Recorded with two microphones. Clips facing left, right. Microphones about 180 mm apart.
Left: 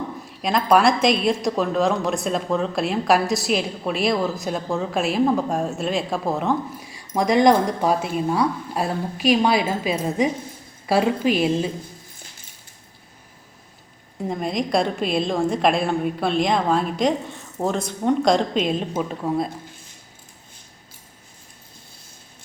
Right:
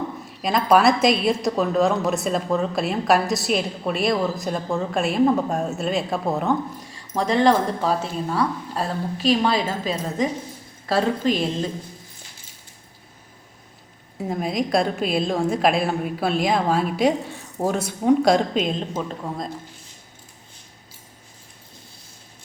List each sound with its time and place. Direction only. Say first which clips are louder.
0.4 s a woman's voice: even; centre (ahead or behind)
14.2 s a woman's voice: even; centre (ahead or behind)